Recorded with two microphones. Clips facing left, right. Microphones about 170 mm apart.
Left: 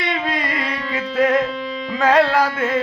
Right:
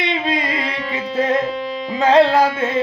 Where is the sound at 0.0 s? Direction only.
20° right (ahead or behind).